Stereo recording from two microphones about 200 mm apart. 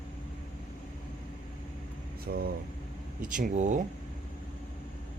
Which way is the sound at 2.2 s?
50° right (ahead or behind).